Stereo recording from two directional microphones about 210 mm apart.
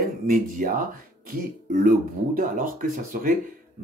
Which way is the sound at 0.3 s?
40° right (ahead or behind).